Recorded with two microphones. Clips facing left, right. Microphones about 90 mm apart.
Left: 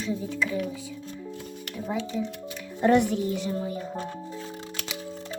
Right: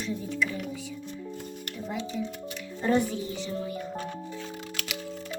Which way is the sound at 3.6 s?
30° left (ahead or behind).